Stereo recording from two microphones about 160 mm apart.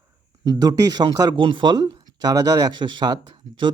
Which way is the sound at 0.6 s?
25° right (ahead or behind).